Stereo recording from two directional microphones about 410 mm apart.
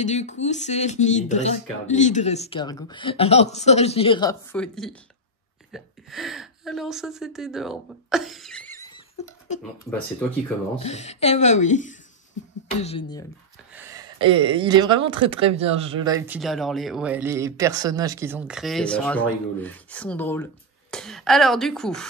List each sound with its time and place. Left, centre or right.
0.0 s a woman's voice: centre
9.6 s speech: centre
10.8 s speech: centre
13.7 s speech: centre